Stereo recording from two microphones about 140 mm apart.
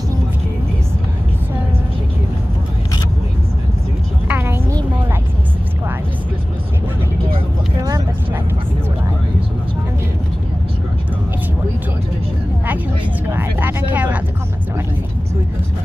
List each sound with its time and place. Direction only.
4.3 s a sound: 15° right (ahead or behind)
7.8 s vehicle: 25° right (ahead or behind)
13.3 s vehicle: 15° right (ahead or behind)